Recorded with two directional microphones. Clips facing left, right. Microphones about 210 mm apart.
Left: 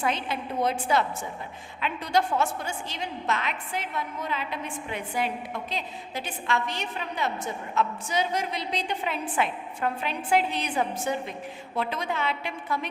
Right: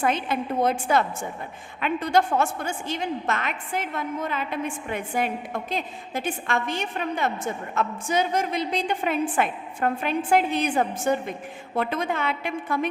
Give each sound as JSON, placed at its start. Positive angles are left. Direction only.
{"t": 0.0, "sound": "a woman's voice", "side_deg": -50}